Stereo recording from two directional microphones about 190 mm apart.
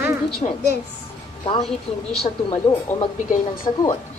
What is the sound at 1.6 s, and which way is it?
Speech, centre (ahead or behind).